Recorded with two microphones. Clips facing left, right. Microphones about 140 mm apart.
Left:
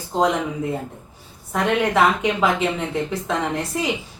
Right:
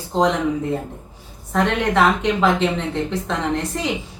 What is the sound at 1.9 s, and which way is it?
A woman's voice, 5° left (ahead or behind).